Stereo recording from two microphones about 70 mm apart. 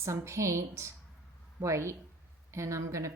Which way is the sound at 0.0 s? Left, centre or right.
Right.